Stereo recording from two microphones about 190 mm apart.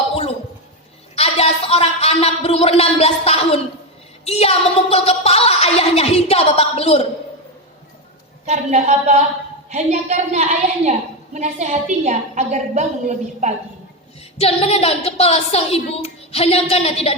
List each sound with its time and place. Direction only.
0.1 s a sound: 35° left (ahead or behind)
1.1 s a woman's voice: 30° left (ahead or behind)
8.4 s a woman's voice: 35° right (ahead or behind)
14.3 s a woman's voice: 30° left (ahead or behind)